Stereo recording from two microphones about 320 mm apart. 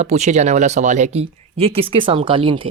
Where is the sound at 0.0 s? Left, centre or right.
Right.